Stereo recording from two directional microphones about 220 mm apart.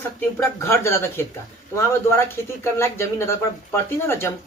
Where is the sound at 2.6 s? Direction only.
10° left (ahead or behind).